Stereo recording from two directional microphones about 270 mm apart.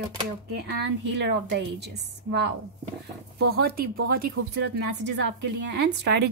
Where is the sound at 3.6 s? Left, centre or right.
Right.